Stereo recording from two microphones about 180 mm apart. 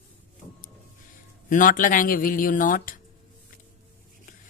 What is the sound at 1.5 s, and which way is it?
Speech, 45° left (ahead or behind).